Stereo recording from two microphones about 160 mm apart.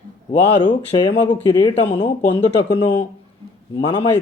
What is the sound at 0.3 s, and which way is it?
Speech, 35° left (ahead or behind).